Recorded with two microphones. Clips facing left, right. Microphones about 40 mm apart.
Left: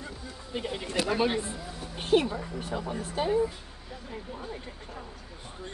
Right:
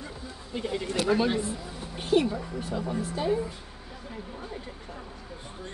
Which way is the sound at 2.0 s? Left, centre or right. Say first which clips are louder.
Even; left.